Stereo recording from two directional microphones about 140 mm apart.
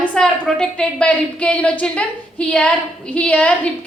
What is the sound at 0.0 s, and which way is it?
A woman's voice, 5° left (ahead or behind).